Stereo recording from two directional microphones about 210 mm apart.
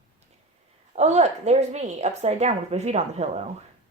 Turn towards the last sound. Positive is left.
turn(degrees=-30)  # may be behind; listen again after turning